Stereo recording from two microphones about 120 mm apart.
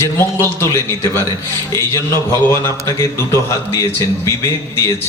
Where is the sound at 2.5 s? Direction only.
25° left (ahead or behind).